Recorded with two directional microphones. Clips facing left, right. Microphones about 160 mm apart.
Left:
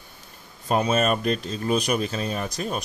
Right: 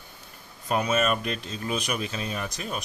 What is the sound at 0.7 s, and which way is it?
Speech, 35° left (ahead or behind).